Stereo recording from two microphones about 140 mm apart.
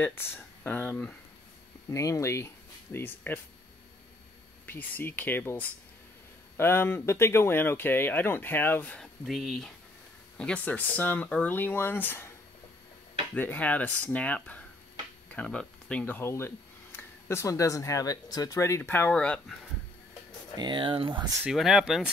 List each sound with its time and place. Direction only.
0.7 s speech: 15° left (ahead or behind)
1.9 s speech: 20° left (ahead or behind)
4.6 s speech: 15° left (ahead or behind)
13.3 s speech: 10° left (ahead or behind)
20.5 s speech: 35° right (ahead or behind)
21.5 s speech: 5° right (ahead or behind)